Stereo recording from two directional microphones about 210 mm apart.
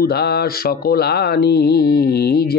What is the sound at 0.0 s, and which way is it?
Speech, 50° left (ahead or behind).